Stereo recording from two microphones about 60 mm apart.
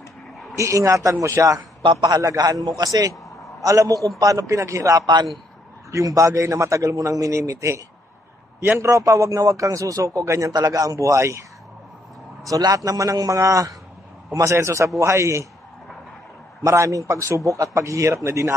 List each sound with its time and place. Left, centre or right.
0.6 s a man's voice: right
2.0 s a man's voice: right
3.6 s a man's voice: right
4.2 s a man's voice: right
10.2 s a man's voice: right
10.6 s a man's voice: right
12.4 s a man's voice: right
13.4 s a man's voice: right
14.3 s a man's voice: right
16.6 s a man's voice: right